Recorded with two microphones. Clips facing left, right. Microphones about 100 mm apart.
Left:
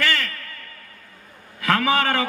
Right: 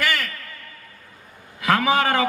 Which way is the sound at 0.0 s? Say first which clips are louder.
Even; 15° right (ahead or behind).